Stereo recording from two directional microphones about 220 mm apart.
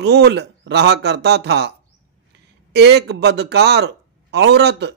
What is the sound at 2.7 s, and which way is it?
A man's voice, 50° right (ahead or behind).